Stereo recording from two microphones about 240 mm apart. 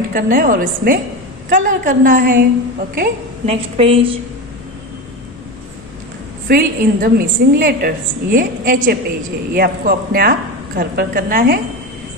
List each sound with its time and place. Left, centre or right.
0.1 s a woman's voice: right
3.5 s a woman's voice: right
6.4 s a woman's voice: right